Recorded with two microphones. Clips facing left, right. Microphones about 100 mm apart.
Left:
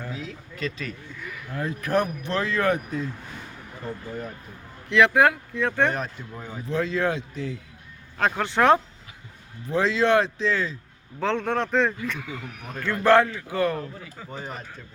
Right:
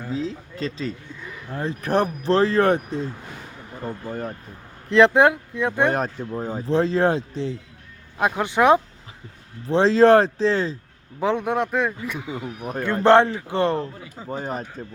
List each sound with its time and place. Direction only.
0.1 s speech: 30° right (ahead or behind)
4.9 s a man's voice: 30° right (ahead or behind); by 5.9 s 15° right (ahead or behind)
5.9 s speech: 40° right (ahead or behind)
8.2 s speech: 15° right (ahead or behind)
9.6 s speech: 30° right (ahead or behind)
11.2 s a man's voice: 15° right (ahead or behind); by 14.8 s 40° right (ahead or behind)